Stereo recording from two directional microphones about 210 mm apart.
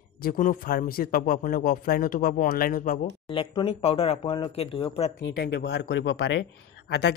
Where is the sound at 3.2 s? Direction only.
20° left (ahead or behind).